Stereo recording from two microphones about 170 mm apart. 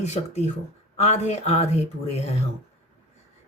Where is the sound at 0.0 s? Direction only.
40° left (ahead or behind).